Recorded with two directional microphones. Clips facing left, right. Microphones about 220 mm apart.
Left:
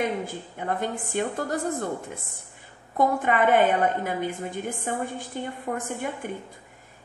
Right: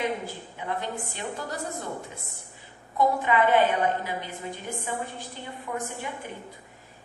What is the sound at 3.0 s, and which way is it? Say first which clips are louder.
A woman's voice: left 1 dB; 50° left (ahead or behind).